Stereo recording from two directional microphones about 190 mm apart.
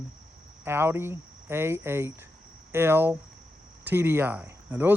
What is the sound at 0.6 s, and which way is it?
Speech, 10° right (ahead or behind).